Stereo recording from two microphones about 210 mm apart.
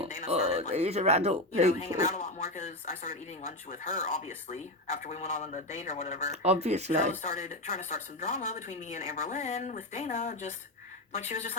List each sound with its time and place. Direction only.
0.3 s a sound: 30° right (ahead or behind)
0.7 s speech: 30° right (ahead or behind)
2.0 s speech: 35° left (ahead or behind)
6.3 s speech: 30° right (ahead or behind)
7.1 s speech: 35° left (ahead or behind)